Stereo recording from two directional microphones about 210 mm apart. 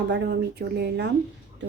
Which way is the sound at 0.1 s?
50° right (ahead or behind).